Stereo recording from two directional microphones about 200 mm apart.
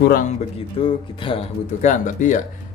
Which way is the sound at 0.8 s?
25° left (ahead or behind).